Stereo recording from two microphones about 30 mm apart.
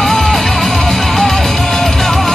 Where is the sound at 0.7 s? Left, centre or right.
Left.